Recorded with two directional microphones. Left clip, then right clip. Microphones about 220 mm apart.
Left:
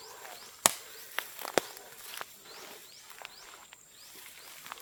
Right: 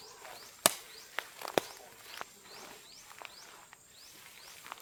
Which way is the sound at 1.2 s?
50° left (ahead or behind).